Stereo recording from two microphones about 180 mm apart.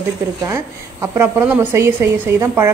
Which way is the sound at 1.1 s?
10° right (ahead or behind).